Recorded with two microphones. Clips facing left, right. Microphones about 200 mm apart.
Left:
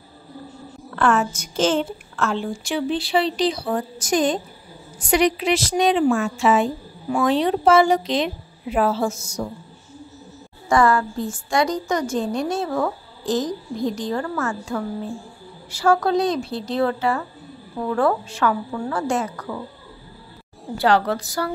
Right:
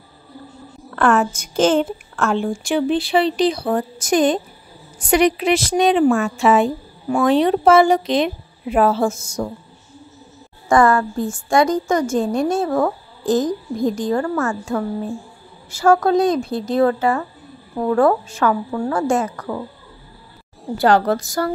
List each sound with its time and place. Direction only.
0.9 s a woman's voice: 55° right (ahead or behind)
10.7 s a woman's voice: 50° right (ahead or behind)
20.7 s a woman's voice: 45° right (ahead or behind)